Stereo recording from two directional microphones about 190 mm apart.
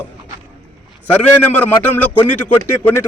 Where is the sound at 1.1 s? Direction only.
10° left (ahead or behind).